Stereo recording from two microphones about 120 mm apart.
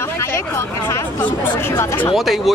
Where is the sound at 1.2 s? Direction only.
15° left (ahead or behind).